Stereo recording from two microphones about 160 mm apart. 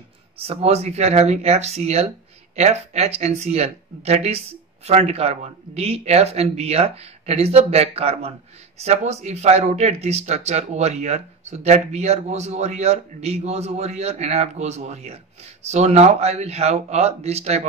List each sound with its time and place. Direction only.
0.4 s speech: 40° right (ahead or behind)